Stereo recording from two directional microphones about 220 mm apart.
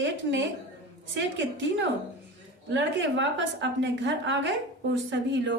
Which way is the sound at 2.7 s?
55° right (ahead or behind).